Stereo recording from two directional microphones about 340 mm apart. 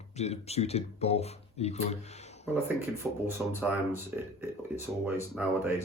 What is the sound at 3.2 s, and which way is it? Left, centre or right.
Speech, centre.